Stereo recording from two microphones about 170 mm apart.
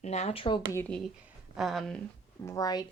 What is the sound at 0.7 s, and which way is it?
Speech, 15° left (ahead or behind).